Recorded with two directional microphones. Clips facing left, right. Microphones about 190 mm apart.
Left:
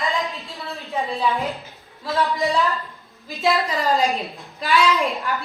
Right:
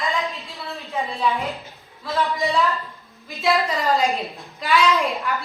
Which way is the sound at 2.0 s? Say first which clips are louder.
Left 1 dB; centre (ahead or behind).